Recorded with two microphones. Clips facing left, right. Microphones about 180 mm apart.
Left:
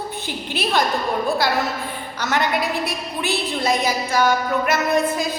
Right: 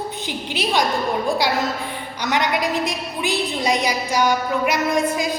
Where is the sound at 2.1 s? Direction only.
15° right (ahead or behind).